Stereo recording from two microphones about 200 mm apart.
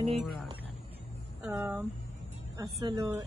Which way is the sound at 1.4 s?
5° right (ahead or behind).